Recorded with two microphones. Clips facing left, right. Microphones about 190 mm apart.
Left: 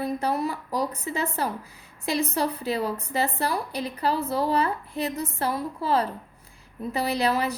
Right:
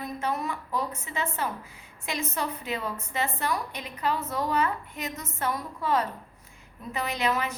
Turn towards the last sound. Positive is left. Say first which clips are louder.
# left 4 dB
turn(degrees=35)  # may be behind; listen again after turning